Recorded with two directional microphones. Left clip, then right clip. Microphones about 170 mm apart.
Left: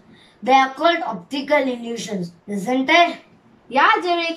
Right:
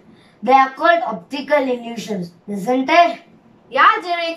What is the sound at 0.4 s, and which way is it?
A woman's voice, 5° right (ahead or behind).